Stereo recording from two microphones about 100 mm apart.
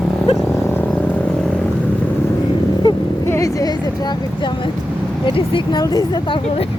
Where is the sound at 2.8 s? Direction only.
45° left (ahead or behind).